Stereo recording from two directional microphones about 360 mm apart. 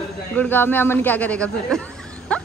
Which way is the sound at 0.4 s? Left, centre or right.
Centre.